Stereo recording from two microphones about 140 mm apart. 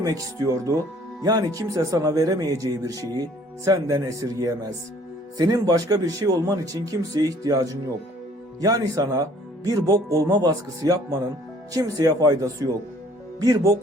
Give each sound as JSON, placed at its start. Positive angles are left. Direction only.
{"t": 0.0, "sound": "speech", "side_deg": -25}